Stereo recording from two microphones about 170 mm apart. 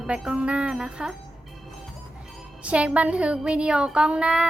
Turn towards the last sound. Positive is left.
turn(degrees=-5)  # may be behind; listen again after turning